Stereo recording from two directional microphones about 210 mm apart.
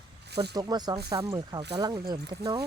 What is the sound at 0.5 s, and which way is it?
Speech, 20° right (ahead or behind).